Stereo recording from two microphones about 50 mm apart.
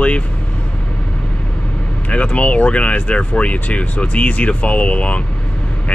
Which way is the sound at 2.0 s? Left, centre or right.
Left.